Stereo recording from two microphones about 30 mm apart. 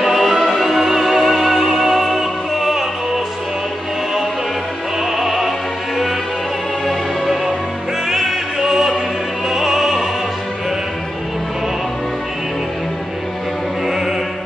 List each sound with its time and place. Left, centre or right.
0.0 s music: centre
5.1 s music: centre
8.1 s opera: centre
9.5 s music: centre